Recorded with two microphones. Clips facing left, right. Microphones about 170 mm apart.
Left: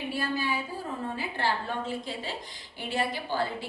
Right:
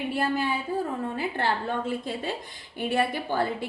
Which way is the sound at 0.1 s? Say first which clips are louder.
Right 3 dB; 55° right (ahead or behind).